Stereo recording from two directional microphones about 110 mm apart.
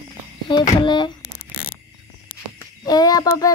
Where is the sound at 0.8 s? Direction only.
45° left (ahead or behind).